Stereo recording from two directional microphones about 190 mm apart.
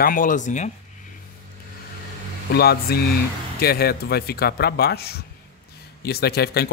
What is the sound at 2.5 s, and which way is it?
Speech, 55° left (ahead or behind).